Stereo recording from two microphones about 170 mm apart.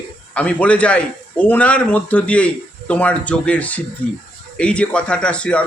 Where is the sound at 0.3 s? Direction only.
10° left (ahead or behind).